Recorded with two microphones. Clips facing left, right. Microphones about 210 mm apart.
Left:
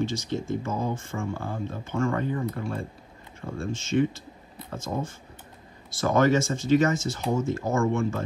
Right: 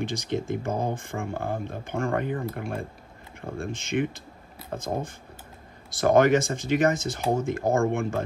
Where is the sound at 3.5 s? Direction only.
15° right (ahead or behind).